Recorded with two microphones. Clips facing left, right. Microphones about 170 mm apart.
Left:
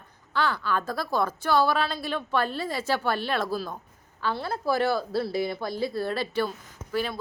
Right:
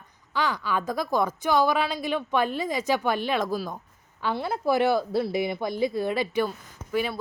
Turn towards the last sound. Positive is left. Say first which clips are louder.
# right 2 dB
turn(degrees=-5)  # may be behind; listen again after turning